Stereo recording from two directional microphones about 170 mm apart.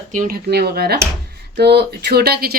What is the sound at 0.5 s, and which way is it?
Speech, 65° right (ahead or behind).